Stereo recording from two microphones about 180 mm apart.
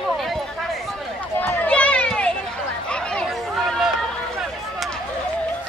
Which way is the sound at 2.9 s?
5° left (ahead or behind).